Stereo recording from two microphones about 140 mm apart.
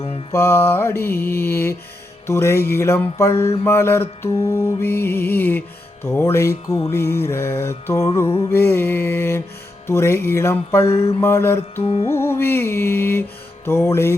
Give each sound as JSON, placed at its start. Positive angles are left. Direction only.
{"t": 0.0, "sound": "music", "side_deg": 45}
{"t": 0.3, "sound": "music", "side_deg": 15}
{"t": 11.8, "sound": "music", "side_deg": 45}
{"t": 12.0, "sound": "music", "side_deg": 20}